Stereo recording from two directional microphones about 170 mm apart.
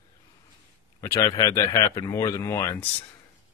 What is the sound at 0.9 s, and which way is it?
Speech, 20° left (ahead or behind).